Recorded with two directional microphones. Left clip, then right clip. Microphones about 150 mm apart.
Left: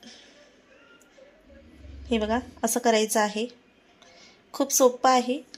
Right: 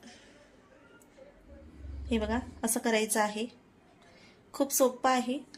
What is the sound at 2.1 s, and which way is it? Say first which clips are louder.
A woman's voice: left 6 dB; 45° left (ahead or behind).